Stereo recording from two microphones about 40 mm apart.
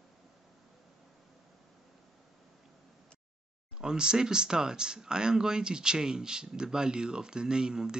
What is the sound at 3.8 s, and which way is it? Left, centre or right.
Speech, centre.